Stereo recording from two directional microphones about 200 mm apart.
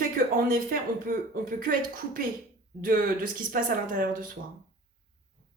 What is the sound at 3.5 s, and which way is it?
Speech, 45° right (ahead or behind).